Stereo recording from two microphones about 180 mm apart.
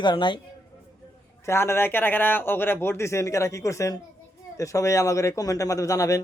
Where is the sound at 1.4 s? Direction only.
15° left (ahead or behind).